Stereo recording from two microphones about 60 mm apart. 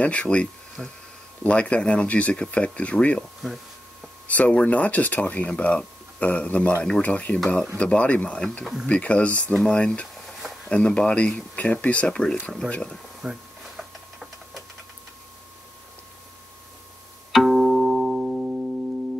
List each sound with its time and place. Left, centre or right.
0.0 s speech: left
0.8 s speech: centre
1.4 s speech: left
4.3 s speech: left
10.1 s a sound: centre
10.7 s speech: centre
13.2 s printer: centre
17.3 s music: centre